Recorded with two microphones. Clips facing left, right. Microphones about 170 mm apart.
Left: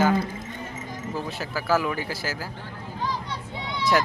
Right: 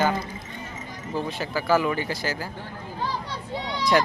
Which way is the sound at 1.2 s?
Centre (ahead or behind).